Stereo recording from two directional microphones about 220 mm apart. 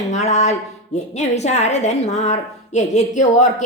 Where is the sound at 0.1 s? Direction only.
30° left (ahead or behind).